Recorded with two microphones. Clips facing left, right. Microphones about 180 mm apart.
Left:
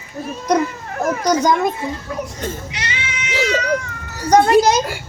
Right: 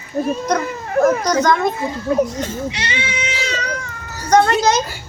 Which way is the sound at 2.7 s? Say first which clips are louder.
Right 4 dB; 30° right (ahead or behind).